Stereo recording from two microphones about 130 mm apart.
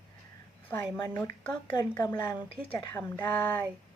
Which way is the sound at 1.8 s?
30° left (ahead or behind).